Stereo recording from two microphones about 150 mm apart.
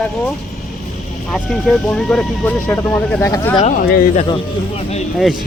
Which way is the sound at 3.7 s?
75° left (ahead or behind).